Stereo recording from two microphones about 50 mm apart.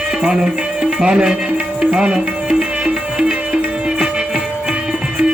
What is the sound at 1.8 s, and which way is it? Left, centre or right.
Music, centre.